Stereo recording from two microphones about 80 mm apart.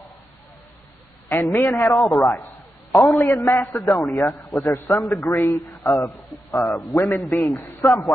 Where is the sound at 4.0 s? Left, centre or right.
Centre.